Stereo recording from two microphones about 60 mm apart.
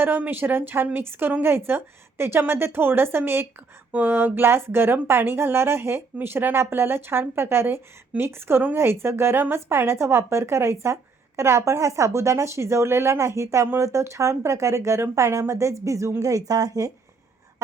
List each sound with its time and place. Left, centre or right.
0.0 s speech: right
16.2 s a woman's voice: right